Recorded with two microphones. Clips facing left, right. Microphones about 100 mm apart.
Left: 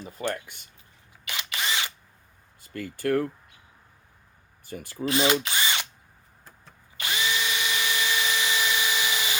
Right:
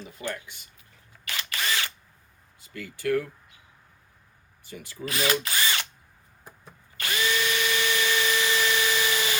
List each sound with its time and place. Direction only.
0.3 s speech: 50° left (ahead or behind)
1.2 s drill: 15° left (ahead or behind)
2.6 s speech: 50° left (ahead or behind)
4.6 s speech: 50° left (ahead or behind)
5.0 s speech: 25° left (ahead or behind)
5.5 s drill: 20° left (ahead or behind)
6.9 s drill: 20° left (ahead or behind)